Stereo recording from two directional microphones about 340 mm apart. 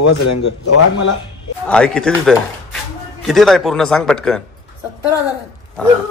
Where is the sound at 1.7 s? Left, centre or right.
Centre.